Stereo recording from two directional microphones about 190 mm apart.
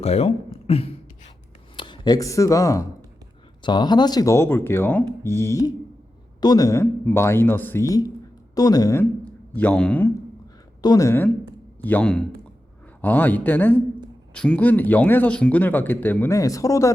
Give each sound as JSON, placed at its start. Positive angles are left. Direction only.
{"t": 0.0, "sound": "speech", "side_deg": 30}
{"t": 9.6, "sound": "speech", "side_deg": 5}
{"t": 10.8, "sound": "speech", "side_deg": 20}